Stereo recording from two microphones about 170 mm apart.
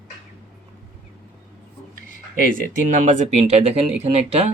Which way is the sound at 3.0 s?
40° right (ahead or behind).